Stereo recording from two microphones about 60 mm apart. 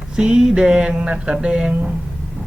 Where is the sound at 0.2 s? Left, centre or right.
Centre.